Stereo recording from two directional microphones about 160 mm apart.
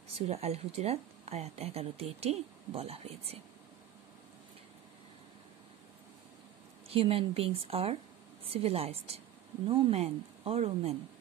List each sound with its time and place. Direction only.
0.1 s speech: 40° right (ahead or behind)
6.9 s speech: 35° right (ahead or behind)